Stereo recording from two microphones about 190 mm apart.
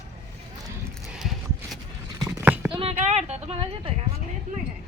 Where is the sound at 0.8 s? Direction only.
5° right (ahead or behind).